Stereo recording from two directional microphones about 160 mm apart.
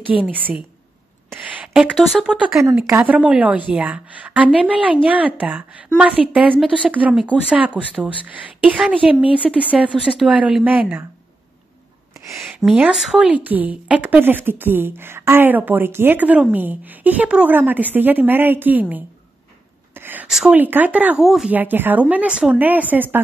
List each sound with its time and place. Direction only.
0.2 s a woman's voice: 10° right (ahead or behind)
12.3 s a sound: 15° right (ahead or behind)
12.5 s a woman's voice: 5° right (ahead or behind)